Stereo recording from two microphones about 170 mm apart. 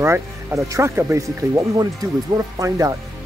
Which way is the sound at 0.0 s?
15° right (ahead or behind).